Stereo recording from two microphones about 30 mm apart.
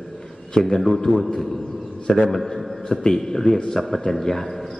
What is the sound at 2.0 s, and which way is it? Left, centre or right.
Speech, left.